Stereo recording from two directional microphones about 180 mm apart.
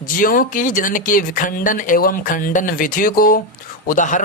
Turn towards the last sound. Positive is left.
turn(degrees=45)  # may be behind; listen again after turning